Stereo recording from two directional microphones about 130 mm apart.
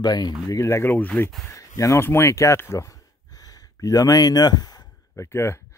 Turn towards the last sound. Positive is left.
turn(degrees=20)  # may be behind; listen again after turning